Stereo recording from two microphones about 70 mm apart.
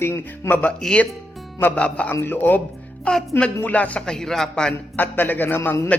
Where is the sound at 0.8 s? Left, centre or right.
Centre.